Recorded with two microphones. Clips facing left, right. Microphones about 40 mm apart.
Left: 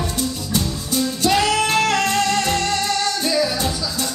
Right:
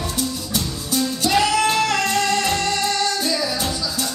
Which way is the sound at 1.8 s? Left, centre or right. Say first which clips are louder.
Left 1 dB; centre.